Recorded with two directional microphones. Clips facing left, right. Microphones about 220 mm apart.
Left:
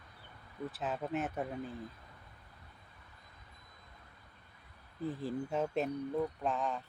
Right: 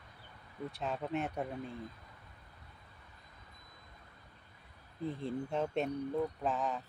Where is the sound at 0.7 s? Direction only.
5° left (ahead or behind).